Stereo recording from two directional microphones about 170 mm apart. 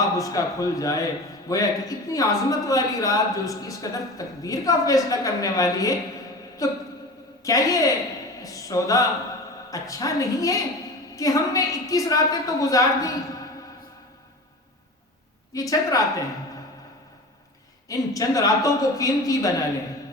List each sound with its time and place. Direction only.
0.2 s a man's voice: 20° left (ahead or behind)
15.5 s a man's voice: 20° left (ahead or behind)
17.8 s a man's voice: 20° left (ahead or behind)